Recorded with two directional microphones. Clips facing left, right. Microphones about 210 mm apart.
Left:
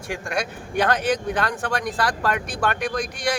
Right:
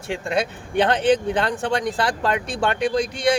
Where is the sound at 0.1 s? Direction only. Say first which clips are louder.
Right 4 dB; 25° right (ahead or behind).